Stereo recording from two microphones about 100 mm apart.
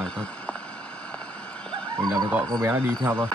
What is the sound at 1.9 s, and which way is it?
Speech, 35° right (ahead or behind).